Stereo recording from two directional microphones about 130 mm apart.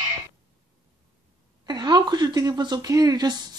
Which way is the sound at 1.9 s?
30° right (ahead or behind).